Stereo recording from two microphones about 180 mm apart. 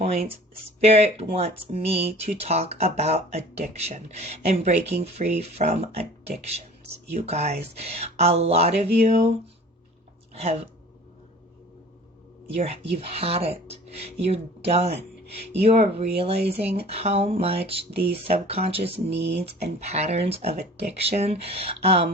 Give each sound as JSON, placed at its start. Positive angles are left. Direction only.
{"t": 0.0, "sound": "speech", "side_deg": -35}
{"t": 10.3, "sound": "speech", "side_deg": -35}
{"t": 12.5, "sound": "speech", "side_deg": -35}
{"t": 19.1, "sound": "speech", "side_deg": -70}
{"t": 19.5, "sound": "speech", "side_deg": -40}